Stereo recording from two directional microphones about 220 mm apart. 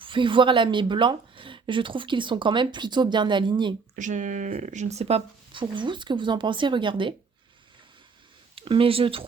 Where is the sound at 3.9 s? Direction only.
35° right (ahead or behind).